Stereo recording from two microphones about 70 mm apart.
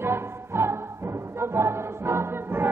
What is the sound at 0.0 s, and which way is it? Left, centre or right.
Music, right.